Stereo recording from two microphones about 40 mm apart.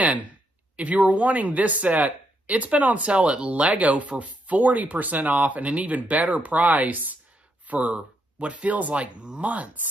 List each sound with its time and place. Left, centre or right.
0.0 s a sound: right
0.7 s speech: right
9.5 s speech: right